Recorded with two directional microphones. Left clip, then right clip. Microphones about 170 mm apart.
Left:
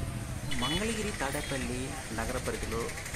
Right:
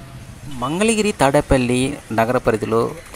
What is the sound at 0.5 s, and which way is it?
Speech, 40° right (ahead or behind).